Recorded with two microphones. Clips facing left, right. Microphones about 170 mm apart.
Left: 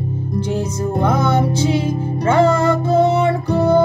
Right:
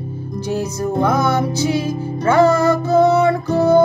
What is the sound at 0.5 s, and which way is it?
Music, 30° left (ahead or behind).